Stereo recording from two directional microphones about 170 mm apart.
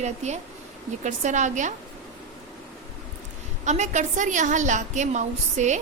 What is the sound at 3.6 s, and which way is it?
A woman's voice, 45° right (ahead or behind).